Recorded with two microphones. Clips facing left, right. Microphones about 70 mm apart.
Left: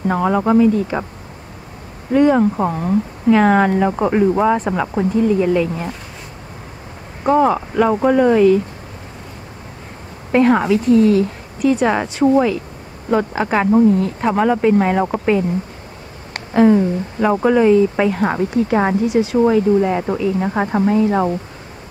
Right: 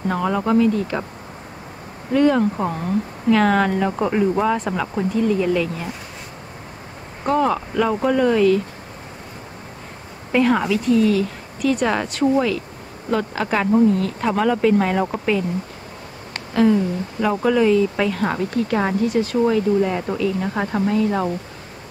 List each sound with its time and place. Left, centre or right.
0.1 s speech: centre
2.1 s speech: centre
7.2 s speech: centre
10.3 s speech: left
11.8 s speech: centre
16.5 s speech: left